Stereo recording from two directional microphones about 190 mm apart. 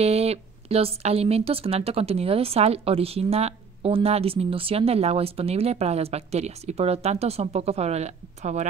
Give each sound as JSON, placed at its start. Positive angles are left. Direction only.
{"t": 0.0, "sound": "speech", "side_deg": -35}